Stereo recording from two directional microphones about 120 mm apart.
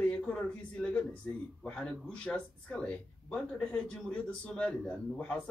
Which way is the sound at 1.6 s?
10° left (ahead or behind).